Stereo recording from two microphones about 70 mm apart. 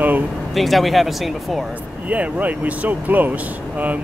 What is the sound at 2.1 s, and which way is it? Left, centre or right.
Speech, right.